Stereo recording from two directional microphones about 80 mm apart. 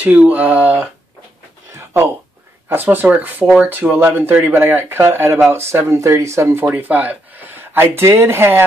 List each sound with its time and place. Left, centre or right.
0.0 s speech: centre
1.7 s a sound: right
2.7 s speech: right